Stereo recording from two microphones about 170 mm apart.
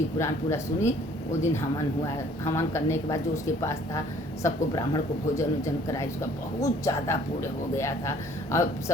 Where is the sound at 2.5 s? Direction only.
15° left (ahead or behind).